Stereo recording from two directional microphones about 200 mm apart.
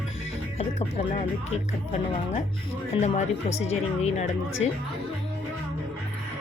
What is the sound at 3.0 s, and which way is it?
Speech, 35° left (ahead or behind).